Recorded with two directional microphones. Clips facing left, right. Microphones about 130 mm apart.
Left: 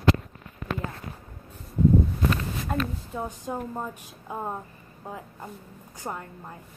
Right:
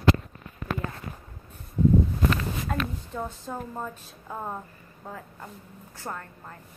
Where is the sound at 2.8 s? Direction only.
10° left (ahead or behind).